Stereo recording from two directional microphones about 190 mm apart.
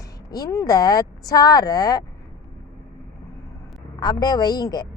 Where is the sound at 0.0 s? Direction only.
20° left (ahead or behind).